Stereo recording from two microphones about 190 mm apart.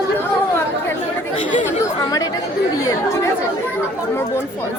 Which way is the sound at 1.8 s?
20° left (ahead or behind).